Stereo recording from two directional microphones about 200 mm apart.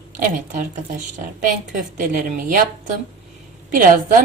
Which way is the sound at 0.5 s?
40° right (ahead or behind).